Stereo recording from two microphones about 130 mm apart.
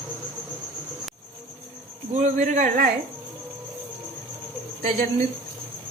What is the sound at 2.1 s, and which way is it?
Speech, 65° right (ahead or behind).